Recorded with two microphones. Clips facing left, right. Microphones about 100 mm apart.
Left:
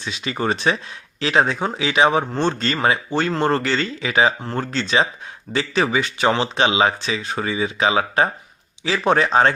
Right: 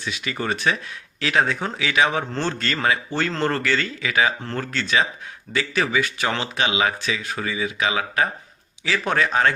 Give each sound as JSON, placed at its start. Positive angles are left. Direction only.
{"t": 0.0, "sound": "speech", "side_deg": 25}